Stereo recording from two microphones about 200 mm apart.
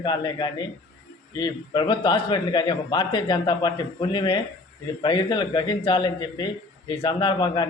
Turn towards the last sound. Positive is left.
turn(degrees=20)  # may be behind; listen again after turning